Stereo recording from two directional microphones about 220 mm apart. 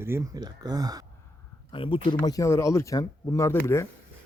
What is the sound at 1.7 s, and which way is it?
A man's voice, 25° left (ahead or behind).